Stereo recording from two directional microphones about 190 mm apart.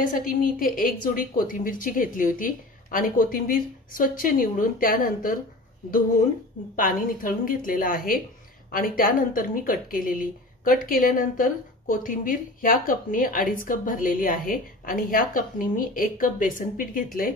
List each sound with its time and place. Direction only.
0.0 s speech: 45° left (ahead or behind)